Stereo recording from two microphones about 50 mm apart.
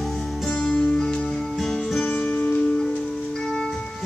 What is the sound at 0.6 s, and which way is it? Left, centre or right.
Music, centre.